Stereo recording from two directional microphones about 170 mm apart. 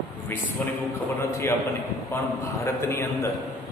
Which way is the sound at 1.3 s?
15° left (ahead or behind).